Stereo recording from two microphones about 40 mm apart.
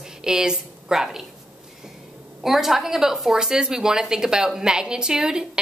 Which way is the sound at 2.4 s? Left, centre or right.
Centre.